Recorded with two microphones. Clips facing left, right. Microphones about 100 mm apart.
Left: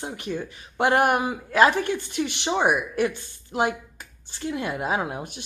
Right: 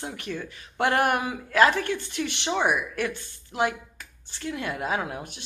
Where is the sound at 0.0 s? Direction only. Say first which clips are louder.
Left 3 dB; 15° left (ahead or behind).